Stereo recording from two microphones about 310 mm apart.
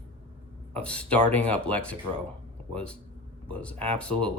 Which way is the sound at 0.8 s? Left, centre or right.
Centre.